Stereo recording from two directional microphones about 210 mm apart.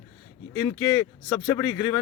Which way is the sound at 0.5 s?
15° left (ahead or behind).